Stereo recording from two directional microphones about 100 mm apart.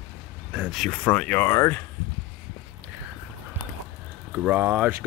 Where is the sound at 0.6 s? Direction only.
5° right (ahead or behind).